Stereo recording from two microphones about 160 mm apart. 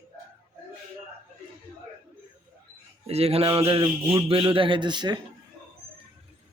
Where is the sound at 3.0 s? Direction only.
40° right (ahead or behind).